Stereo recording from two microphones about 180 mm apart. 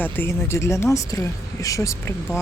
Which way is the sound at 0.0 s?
10° left (ahead or behind).